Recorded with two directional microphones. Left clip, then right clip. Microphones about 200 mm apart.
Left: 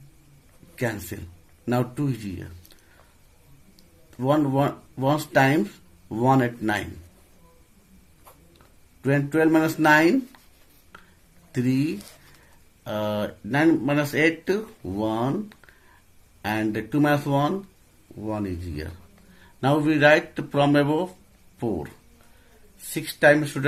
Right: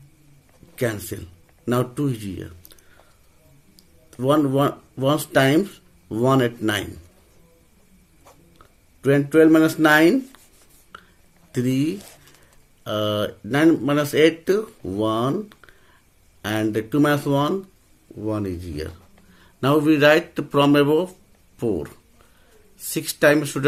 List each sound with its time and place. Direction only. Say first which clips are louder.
0.8 s speech: right 4 dB; 40° right (ahead or behind)
4.2 s speech: right 3 dB; 40° right (ahead or behind)
9.0 s speech: right 6 dB; 35° right (ahead or behind)
11.5 s speech: right 2 dB; 45° right (ahead or behind)
22.8 s speech: right 1 dB; 45° right (ahead or behind)